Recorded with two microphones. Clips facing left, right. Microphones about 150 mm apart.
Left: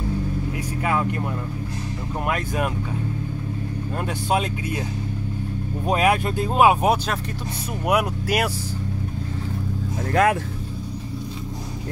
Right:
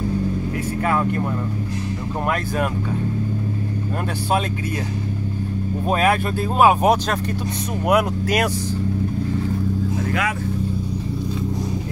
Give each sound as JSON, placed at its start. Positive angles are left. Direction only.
{"t": 2.2, "sound": "speech", "side_deg": 15}
{"t": 5.9, "sound": "speech", "side_deg": 15}
{"t": 7.9, "sound": "speech", "side_deg": 10}